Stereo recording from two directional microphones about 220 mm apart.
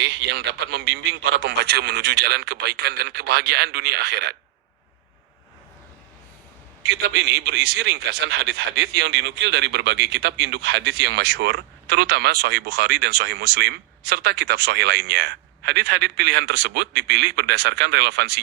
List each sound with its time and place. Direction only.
0.0 s a man's voice: 50° right (ahead or behind)
6.8 s a man's voice: 50° right (ahead or behind)